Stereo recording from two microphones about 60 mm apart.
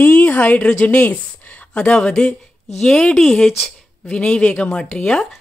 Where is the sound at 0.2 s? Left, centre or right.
Left.